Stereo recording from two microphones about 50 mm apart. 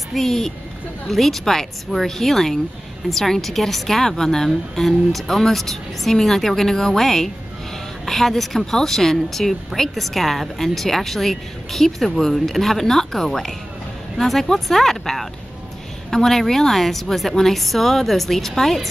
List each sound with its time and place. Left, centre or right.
0.1 s a woman's voice: centre